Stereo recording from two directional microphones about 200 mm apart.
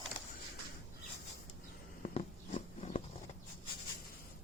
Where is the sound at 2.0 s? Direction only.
35° left (ahead or behind).